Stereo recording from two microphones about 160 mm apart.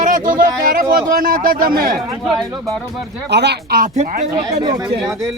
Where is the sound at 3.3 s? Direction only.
90° right.